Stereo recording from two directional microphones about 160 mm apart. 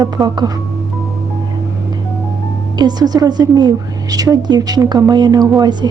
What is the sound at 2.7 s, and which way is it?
A woman's voice, 25° right (ahead or behind).